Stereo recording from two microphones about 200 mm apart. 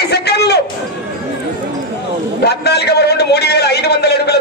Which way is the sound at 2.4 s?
55° left (ahead or behind).